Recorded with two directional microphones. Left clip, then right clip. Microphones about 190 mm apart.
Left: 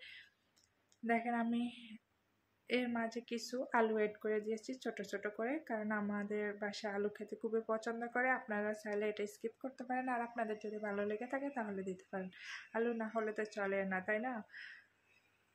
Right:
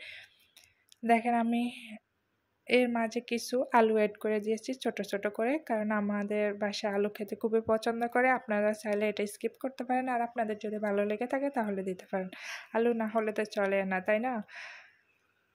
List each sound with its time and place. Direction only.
0.0 s whispering: 40° right (ahead or behind)
1.0 s speech: 40° right (ahead or behind)